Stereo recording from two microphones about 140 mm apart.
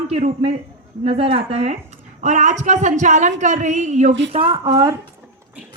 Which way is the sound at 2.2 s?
60° right (ahead or behind).